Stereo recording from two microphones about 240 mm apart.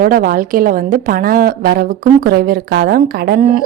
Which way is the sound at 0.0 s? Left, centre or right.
Right.